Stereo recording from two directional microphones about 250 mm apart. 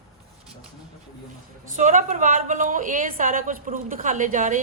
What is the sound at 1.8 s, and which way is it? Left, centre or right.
Speech, right.